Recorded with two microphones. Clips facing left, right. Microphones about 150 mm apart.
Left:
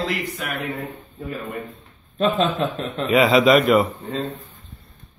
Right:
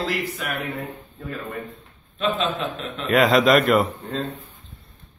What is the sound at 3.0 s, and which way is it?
Speech, centre (ahead or behind).